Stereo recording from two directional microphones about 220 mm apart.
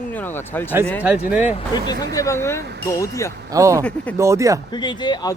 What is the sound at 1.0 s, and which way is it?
Speech, 5° right (ahead or behind).